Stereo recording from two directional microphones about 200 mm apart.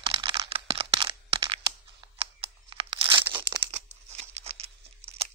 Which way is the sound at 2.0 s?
25° right (ahead or behind).